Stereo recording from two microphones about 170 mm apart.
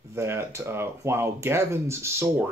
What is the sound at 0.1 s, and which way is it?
Speech, 15° right (ahead or behind).